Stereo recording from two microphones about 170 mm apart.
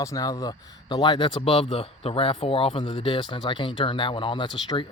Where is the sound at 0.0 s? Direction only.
20° left (ahead or behind).